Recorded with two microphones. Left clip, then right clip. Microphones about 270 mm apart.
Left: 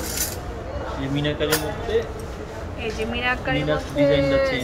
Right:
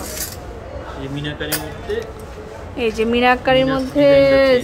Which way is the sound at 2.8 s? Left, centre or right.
Right.